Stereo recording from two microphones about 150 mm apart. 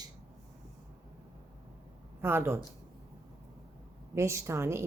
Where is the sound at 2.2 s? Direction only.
15° right (ahead or behind).